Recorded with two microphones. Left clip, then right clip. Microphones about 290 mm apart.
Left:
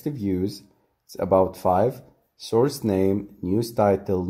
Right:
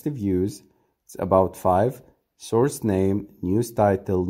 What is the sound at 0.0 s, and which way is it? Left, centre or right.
Speech, right.